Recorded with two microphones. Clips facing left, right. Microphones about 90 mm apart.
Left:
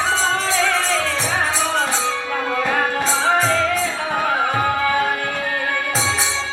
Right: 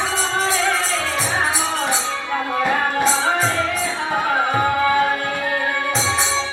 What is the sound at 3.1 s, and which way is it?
Music, 25° right (ahead or behind).